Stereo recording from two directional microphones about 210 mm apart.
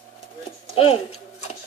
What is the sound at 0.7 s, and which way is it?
Tick-tock, 25° left (ahead or behind).